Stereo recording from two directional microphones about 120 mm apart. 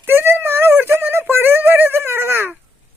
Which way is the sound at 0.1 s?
20° right (ahead or behind).